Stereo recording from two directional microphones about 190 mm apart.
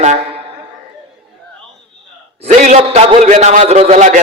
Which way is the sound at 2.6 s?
35° right (ahead or behind).